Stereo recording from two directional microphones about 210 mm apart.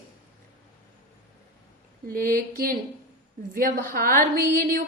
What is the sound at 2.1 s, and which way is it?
A woman's voice, 45° right (ahead or behind).